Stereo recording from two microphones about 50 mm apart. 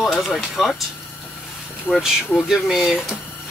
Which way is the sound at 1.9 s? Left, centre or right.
Left.